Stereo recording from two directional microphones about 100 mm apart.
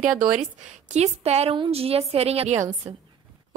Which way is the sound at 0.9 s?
90° right.